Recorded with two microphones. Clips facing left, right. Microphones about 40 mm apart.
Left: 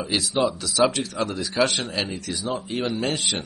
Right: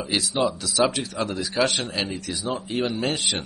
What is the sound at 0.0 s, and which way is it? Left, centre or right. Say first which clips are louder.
Speech: left 1 dB; centre.